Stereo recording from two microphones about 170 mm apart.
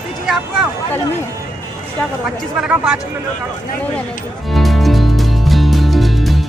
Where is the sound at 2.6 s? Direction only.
5° right (ahead or behind).